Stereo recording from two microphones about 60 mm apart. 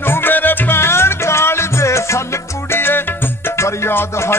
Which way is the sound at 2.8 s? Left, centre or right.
Left.